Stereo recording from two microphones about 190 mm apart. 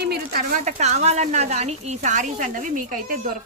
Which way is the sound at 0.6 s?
35° right (ahead or behind).